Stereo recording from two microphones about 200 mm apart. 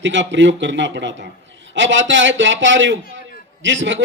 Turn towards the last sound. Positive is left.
turn(degrees=-70)  # may be behind; listen again after turning